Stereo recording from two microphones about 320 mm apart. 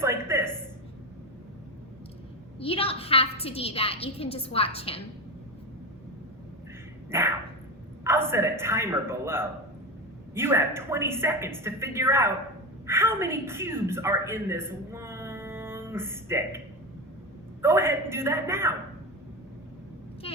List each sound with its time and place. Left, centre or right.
0.0 s a sound: centre
2.6 s a woman's voice: centre
7.1 s a woman's voice: centre
17.6 s a woman's voice: centre